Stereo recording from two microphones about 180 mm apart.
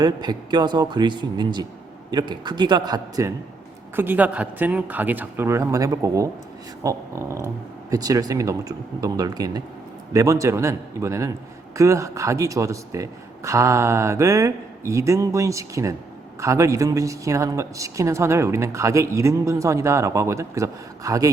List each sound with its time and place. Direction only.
0.0 s speech: 25° right (ahead or behind)
3.9 s a woman's voice: 10° right (ahead or behind)